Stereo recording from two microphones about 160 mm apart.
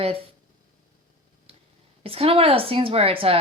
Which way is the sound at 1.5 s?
35° right (ahead or behind).